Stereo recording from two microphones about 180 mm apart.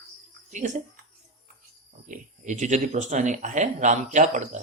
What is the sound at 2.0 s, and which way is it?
Speech, 45° right (ahead or behind).